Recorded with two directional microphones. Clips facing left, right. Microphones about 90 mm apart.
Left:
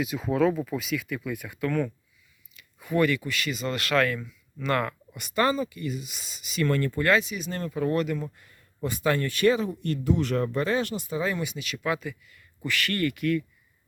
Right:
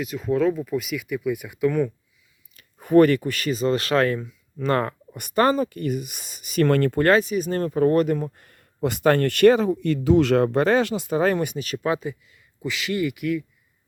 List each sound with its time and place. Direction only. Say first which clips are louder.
0.0 s speech: right 2 dB; 5° left (ahead or behind); by 1.9 s 15° right (ahead or behind)
2.6 s speech: right 9 dB; 45° right (ahead or behind)
5.1 s speech: right 5 dB; 45° right (ahead or behind); by 7.0 s 70° right (ahead or behind)
7.0 s speech: right 6 dB; 45° right (ahead or behind)
8.8 s speech: right 7 dB; 75° right (ahead or behind); by 11.5 s 60° right (ahead or behind)
11.5 s speech: right 5 dB; 40° right (ahead or behind)
12.6 s speech: right 2 dB; 15° right (ahead or behind)